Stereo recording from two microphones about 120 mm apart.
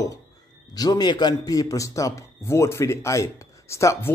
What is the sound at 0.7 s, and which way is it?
A man's voice, 35° left (ahead or behind).